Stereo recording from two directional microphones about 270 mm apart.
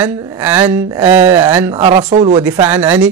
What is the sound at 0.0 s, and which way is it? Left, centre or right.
Speech, centre.